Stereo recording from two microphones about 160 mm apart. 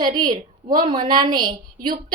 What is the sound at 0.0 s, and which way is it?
A woman's voice, 25° right (ahead or behind).